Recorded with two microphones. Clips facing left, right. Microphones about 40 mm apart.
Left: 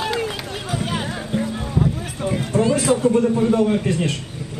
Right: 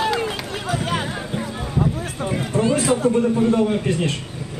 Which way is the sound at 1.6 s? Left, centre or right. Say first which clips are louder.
Even; centre.